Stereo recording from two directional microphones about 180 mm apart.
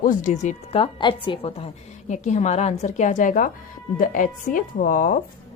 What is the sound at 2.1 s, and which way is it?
A woman's voice, 40° left (ahead or behind).